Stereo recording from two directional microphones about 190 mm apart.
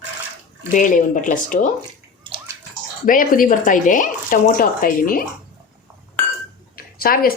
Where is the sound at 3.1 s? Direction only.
45° left (ahead or behind).